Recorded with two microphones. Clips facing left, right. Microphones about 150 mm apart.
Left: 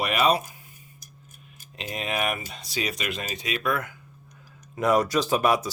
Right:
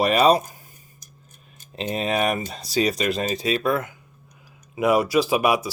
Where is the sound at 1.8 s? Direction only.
35° right (ahead or behind).